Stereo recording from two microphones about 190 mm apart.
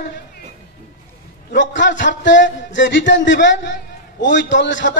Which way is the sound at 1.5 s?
75° left (ahead or behind).